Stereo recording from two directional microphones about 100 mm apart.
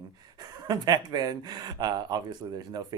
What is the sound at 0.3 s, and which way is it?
Speech, 45° right (ahead or behind).